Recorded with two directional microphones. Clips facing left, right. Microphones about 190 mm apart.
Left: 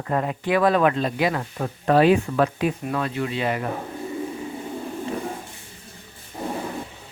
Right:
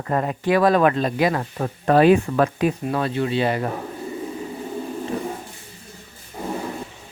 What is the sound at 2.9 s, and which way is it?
Speech, 30° right (ahead or behind).